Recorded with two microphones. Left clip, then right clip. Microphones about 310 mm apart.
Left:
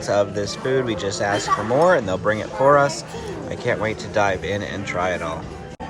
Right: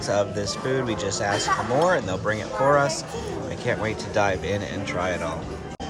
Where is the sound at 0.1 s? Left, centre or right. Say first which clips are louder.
Left 4 dB; centre.